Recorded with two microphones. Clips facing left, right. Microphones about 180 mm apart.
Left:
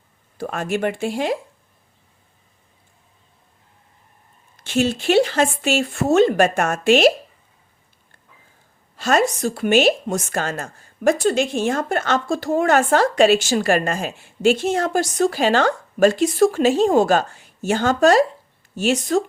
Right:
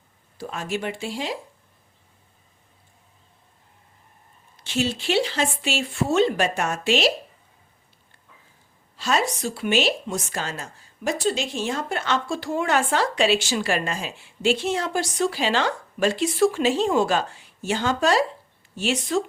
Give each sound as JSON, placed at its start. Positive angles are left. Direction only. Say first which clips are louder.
{"t": 0.3, "sound": "a woman's voice", "louder": "left 6 dB", "side_deg": 55}
{"t": 4.6, "sound": "a woman's voice", "louder": "left 6 dB", "side_deg": 50}
{"t": 9.0, "sound": "a woman's voice", "louder": "left 6 dB", "side_deg": 50}